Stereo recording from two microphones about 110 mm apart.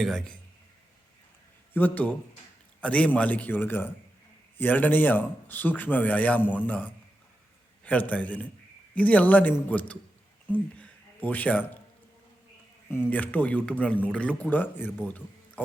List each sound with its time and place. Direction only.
0.0 s a man's voice: 5° left (ahead or behind)
1.7 s a man's voice: 15° left (ahead or behind)
12.9 s a man's voice: 15° left (ahead or behind)
15.0 s a sound: 15° left (ahead or behind)